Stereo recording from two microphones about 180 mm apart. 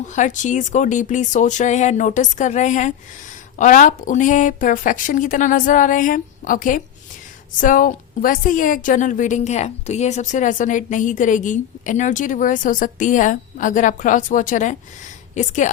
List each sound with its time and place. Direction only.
0.1 s a woman's voice: 45° left (ahead or behind)